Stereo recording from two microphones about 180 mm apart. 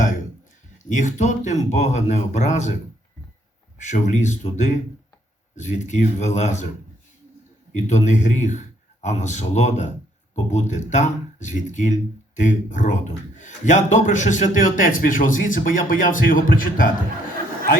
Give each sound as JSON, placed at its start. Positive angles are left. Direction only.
{"t": 0.9, "sound": "speech", "side_deg": 40}
{"t": 3.8, "sound": "speech", "side_deg": 40}
{"t": 7.9, "sound": "speech", "side_deg": 40}